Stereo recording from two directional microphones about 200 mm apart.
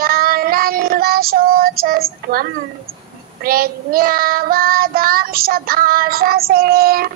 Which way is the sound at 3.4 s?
50° right (ahead or behind).